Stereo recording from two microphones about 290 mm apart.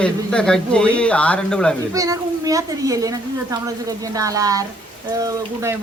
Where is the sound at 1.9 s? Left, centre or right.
Centre.